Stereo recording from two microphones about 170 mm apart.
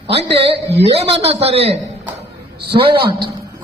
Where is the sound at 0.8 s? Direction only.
35° right (ahead or behind).